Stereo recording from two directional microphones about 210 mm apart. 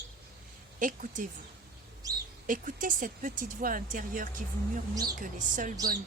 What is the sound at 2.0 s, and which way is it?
Bird, 15° right (ahead or behind).